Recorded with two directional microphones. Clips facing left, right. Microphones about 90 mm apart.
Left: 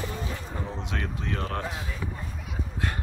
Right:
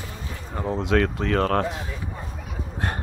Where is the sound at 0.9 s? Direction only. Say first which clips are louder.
Right 13 dB; 80° right.